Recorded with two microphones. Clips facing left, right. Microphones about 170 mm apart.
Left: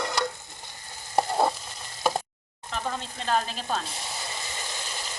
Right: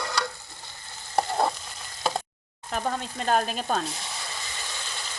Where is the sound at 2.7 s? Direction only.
50° right (ahead or behind).